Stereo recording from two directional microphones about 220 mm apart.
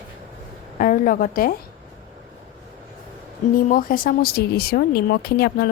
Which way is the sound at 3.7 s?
40° left (ahead or behind).